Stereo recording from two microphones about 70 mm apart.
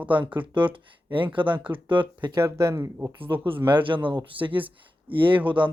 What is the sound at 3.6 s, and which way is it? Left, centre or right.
Speech, right.